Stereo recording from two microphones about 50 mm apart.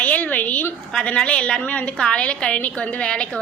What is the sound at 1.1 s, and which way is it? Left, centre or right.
A woman's voice, left.